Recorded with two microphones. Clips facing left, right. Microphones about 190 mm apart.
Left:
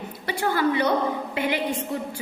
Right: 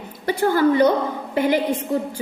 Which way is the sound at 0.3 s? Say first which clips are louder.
Right 6 dB; 45° right (ahead or behind).